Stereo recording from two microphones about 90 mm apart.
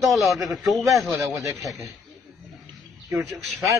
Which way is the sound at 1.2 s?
35° right (ahead or behind).